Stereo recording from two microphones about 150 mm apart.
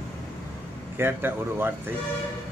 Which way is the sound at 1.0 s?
15° right (ahead or behind).